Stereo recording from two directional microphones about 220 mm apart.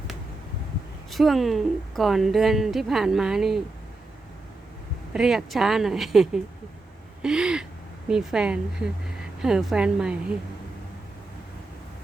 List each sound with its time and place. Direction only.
1.1 s a woman's voice: centre (ahead or behind)
5.1 s a woman's voice: centre (ahead or behind)